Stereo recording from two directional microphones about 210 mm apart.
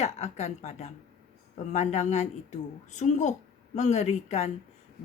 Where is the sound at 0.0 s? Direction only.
30° left (ahead or behind).